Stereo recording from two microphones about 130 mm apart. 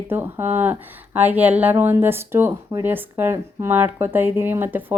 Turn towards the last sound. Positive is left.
turn(degrees=-15)  # may be behind; listen again after turning